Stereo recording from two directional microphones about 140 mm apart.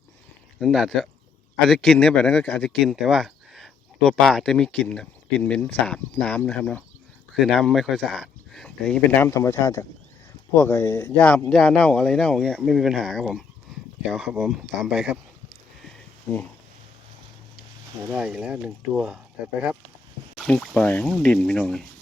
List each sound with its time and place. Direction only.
0.6 s speech: centre (ahead or behind)
9.3 s speech: 20° left (ahead or behind)
11.3 s speech: 10° left (ahead or behind)
14.8 s a sound: 5° right (ahead or behind)
18.1 s speech: 10° right (ahead or behind)
20.5 s speech: 10° left (ahead or behind)